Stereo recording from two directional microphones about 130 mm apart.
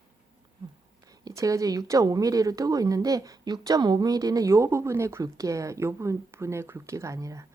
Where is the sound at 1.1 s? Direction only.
25° right (ahead or behind).